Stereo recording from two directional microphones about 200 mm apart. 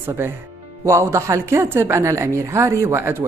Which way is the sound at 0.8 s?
15° right (ahead or behind).